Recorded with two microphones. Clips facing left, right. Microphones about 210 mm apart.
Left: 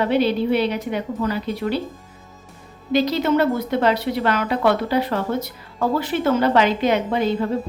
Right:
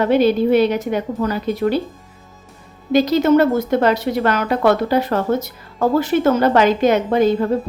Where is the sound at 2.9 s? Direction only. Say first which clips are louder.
Right 5 dB; 45° right (ahead or behind).